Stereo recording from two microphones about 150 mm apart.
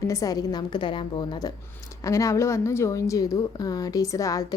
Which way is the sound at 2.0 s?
20° left (ahead or behind).